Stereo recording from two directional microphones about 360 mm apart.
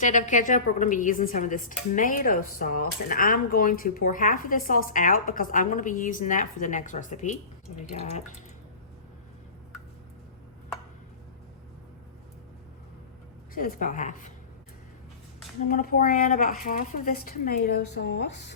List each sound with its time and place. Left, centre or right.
0.0 s speech: left
13.5 s speech: left
15.6 s speech: left